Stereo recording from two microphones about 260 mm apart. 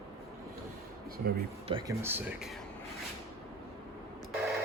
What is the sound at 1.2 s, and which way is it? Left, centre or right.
Speech, right.